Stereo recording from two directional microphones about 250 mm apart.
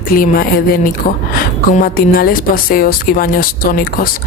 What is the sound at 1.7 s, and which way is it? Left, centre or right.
Speech, left.